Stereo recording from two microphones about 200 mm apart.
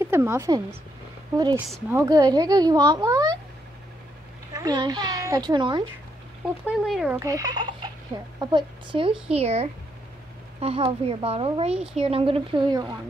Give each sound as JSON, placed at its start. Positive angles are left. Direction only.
{"t": 0.0, "sound": "speech", "side_deg": -10}
{"t": 4.6, "sound": "speech", "side_deg": -20}
{"t": 6.6, "sound": "speech", "side_deg": -5}
{"t": 7.2, "sound": "speech", "side_deg": -15}